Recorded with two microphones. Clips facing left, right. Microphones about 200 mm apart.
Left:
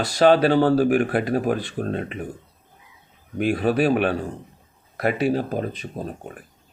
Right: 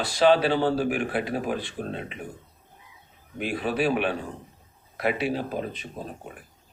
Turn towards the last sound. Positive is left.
turn(degrees=45)  # may be behind; listen again after turning